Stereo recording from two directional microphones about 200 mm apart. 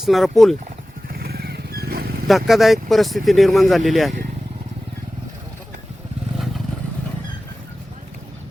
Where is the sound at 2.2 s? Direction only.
Centre (ahead or behind).